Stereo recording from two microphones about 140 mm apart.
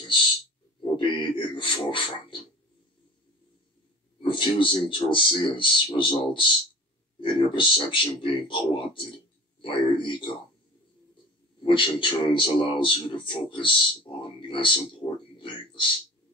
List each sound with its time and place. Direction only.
0.9 s a sound: 35° left (ahead or behind)
4.2 s speech: 35° left (ahead or behind)
11.6 s speech: 35° left (ahead or behind)